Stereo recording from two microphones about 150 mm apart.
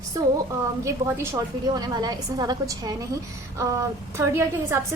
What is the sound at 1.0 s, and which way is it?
A woman's voice, 15° right (ahead or behind).